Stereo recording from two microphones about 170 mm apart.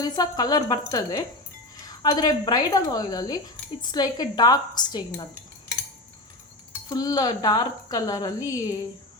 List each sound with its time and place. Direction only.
0.0 s speech: 20° left (ahead or behind)
6.8 s speech: 20° left (ahead or behind)